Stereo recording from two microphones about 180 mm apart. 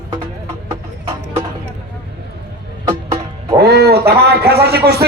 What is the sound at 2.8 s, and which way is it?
Music, 30° right (ahead or behind).